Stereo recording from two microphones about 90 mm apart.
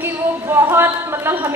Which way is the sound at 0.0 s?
25° right (ahead or behind).